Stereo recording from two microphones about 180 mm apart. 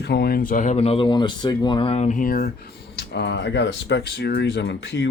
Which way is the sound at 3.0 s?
70° left (ahead or behind).